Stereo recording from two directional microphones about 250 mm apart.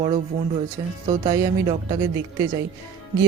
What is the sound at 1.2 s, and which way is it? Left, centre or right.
Speech, right.